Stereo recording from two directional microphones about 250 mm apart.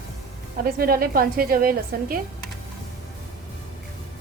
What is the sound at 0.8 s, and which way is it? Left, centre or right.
A woman's voice, right.